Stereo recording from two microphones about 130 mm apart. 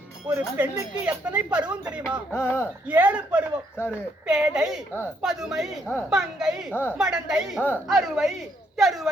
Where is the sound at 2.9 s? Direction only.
10° right (ahead or behind).